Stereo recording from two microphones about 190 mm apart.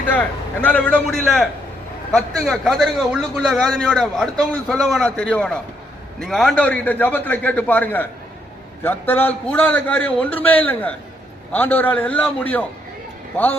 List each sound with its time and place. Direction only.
0.1 s a man's voice: 10° left (ahead or behind)